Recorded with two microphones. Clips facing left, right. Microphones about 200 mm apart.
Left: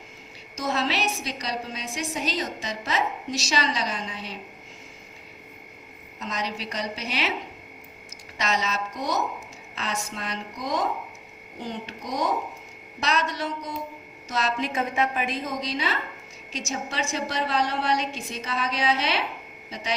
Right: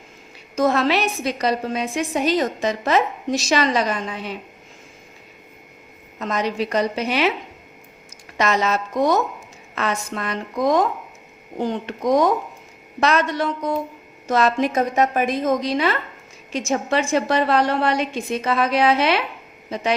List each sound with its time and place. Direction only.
0.5 s a woman's voice: 55° right (ahead or behind)
6.1 s a woman's voice: 55° right (ahead or behind)
8.4 s a woman's voice: 55° right (ahead or behind)
14.6 s a woman's voice: 40° right (ahead or behind)